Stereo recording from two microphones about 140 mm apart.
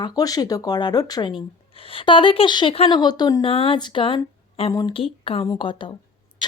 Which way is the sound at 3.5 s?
40° left (ahead or behind).